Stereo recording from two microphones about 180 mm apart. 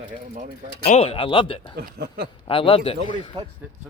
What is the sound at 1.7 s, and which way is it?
Speech, 60° right (ahead or behind).